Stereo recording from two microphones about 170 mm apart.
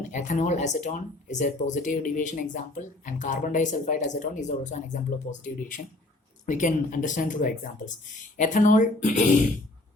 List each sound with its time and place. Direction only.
0.1 s speech: 45° left (ahead or behind)